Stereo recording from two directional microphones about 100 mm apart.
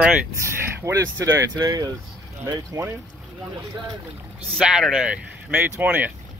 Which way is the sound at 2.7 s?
25° right (ahead or behind).